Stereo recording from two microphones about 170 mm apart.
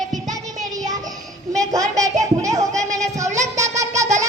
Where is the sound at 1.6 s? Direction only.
20° right (ahead or behind).